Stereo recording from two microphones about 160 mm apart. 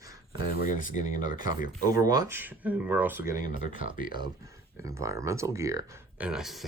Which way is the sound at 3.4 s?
60° left (ahead or behind).